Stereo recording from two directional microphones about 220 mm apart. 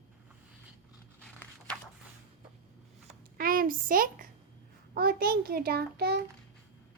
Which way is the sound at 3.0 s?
40° right (ahead or behind).